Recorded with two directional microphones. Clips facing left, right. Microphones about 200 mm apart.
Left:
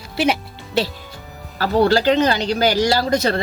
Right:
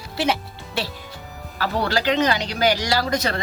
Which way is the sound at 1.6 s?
30° left (ahead or behind).